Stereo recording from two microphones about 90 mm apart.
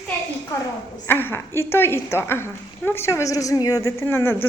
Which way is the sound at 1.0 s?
25° left (ahead or behind).